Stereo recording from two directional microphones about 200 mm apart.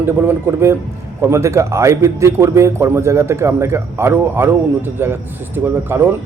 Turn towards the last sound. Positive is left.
turn(degrees=-10)  # may be behind; listen again after turning